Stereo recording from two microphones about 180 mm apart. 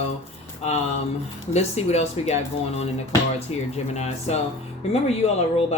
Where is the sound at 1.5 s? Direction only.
35° left (ahead or behind).